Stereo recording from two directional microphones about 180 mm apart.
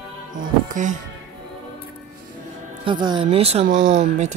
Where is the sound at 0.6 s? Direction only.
45° right (ahead or behind).